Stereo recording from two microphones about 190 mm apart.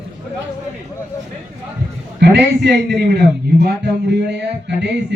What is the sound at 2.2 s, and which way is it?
A man's voice, 65° right (ahead or behind).